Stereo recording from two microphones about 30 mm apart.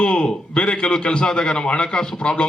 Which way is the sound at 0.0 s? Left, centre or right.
Left.